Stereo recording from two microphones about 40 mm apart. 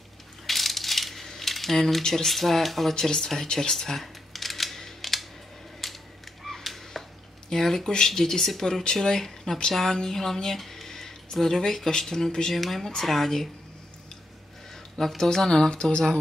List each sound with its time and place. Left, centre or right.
0.5 s coin: centre
2.0 s speech: centre
3.5 s camera: centre
5.8 s a sound: centre
8.8 s speech: centre
12.5 s speech: centre
15.0 s speech: centre
15.2 s speech: centre
15.7 s speech: left